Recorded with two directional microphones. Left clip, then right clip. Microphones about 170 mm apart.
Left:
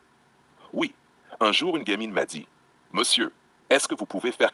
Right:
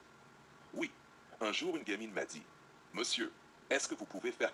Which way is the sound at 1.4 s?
50° left (ahead or behind).